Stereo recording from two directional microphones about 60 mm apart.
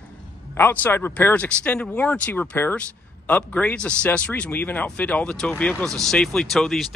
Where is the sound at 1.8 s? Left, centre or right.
Left.